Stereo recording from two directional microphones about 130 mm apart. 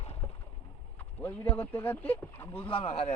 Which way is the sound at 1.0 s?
15° left (ahead or behind).